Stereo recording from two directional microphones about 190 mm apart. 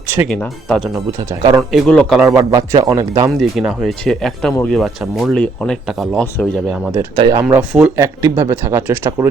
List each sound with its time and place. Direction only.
0.3 s speech: 5° left (ahead or behind)
1.4 s speech: 25° right (ahead or behind)
1.7 s speech: centre (ahead or behind)
2.4 s speech: 20° right (ahead or behind)
3.5 s speech: 5° right (ahead or behind)
7.2 s speech: 20° right (ahead or behind)
7.4 s speech: 5° right (ahead or behind)
7.9 s speech: 15° right (ahead or behind)